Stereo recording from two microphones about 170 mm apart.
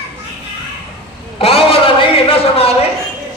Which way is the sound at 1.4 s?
35° left (ahead or behind).